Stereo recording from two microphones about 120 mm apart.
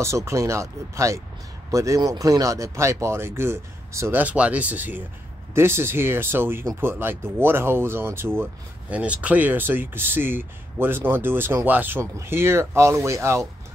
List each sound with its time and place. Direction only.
0.0 s a man's voice: 25° right (ahead or behind)